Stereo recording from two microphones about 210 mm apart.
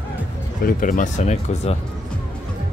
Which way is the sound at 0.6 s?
40° left (ahead or behind).